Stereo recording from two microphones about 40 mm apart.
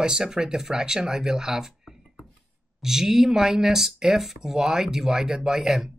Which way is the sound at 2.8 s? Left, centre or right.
Centre.